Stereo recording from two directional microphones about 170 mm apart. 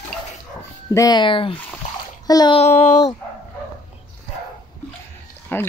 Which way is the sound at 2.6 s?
40° left (ahead or behind).